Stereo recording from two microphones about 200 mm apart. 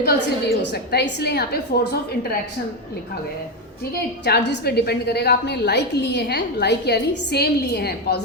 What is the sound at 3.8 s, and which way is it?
A woman's voice, 55° left (ahead or behind).